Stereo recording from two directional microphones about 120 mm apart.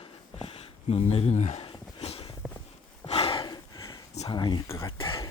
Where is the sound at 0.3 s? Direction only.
55° left (ahead or behind); by 1.6 s 75° left (ahead or behind).